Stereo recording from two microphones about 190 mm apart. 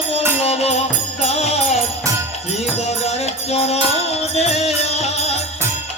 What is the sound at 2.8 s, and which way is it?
Music, 35° left (ahead or behind).